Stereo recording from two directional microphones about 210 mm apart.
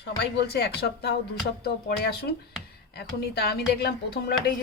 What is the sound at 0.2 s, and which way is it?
Speech, 50° left (ahead or behind).